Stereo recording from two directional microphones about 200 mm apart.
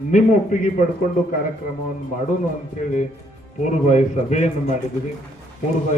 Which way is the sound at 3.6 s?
40° left (ahead or behind).